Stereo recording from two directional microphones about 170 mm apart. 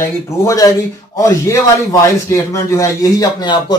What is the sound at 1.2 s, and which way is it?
Speech, 15° left (ahead or behind).